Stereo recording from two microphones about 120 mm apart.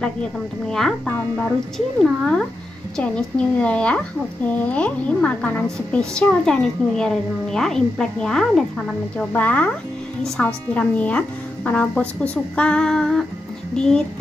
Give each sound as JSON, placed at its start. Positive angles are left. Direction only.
{"t": 0.7, "sound": "a woman's voice", "side_deg": 5}